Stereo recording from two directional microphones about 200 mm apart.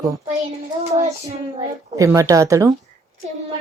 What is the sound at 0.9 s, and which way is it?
Child singing, 35° right (ahead or behind).